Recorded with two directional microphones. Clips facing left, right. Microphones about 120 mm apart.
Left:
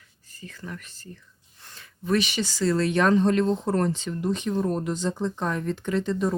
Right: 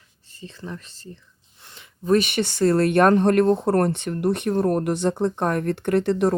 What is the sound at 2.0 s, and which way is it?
Speech, 50° right (ahead or behind).